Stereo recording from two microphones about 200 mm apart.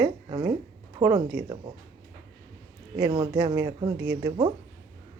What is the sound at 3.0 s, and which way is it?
Speech, 20° right (ahead or behind).